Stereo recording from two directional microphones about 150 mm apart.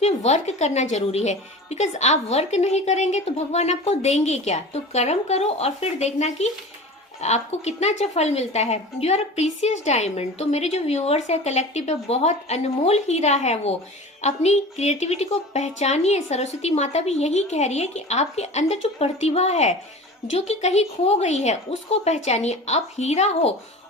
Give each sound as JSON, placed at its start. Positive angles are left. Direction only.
{"t": 0.0, "sound": "a woman's voice", "side_deg": 45}